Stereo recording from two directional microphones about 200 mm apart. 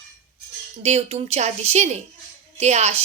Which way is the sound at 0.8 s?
35° right (ahead or behind).